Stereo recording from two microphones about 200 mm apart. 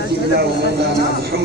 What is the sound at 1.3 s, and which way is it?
Speech, 50° right (ahead or behind).